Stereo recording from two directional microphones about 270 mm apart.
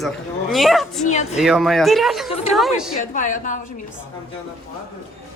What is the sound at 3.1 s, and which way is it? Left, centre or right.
Speech, left.